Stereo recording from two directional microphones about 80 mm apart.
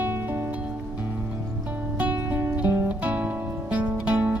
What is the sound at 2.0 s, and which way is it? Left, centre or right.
Music, centre.